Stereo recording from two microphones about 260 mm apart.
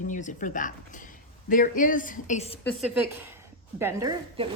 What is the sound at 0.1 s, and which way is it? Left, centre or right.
Speech, left.